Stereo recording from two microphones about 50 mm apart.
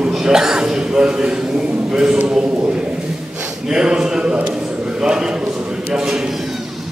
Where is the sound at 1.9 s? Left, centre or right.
Centre.